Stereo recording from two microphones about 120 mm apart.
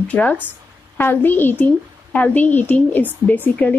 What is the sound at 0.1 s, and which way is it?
Speech, 10° left (ahead or behind).